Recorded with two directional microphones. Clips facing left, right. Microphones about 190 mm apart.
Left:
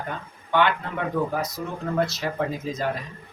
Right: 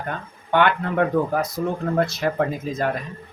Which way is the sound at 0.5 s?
55° right (ahead or behind).